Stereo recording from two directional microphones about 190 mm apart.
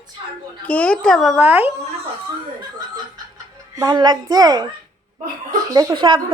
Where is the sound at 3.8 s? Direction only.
20° right (ahead or behind).